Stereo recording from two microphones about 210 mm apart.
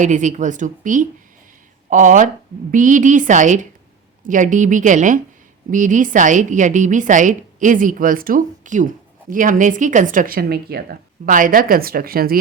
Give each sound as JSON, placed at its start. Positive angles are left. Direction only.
{"t": 0.0, "sound": "a woman's voice", "side_deg": -35}